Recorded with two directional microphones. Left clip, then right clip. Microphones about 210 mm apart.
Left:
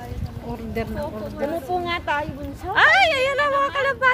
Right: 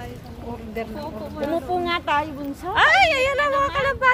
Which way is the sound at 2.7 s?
Centre (ahead or behind).